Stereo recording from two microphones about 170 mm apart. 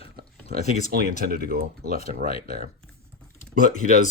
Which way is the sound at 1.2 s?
60° right (ahead or behind).